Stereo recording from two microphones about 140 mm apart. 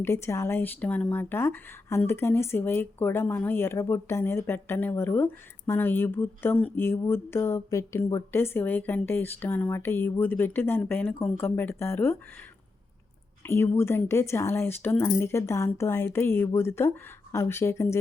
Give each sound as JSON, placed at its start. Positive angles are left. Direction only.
{"t": 0.0, "sound": "speech", "side_deg": 20}
{"t": 13.5, "sound": "speech", "side_deg": 15}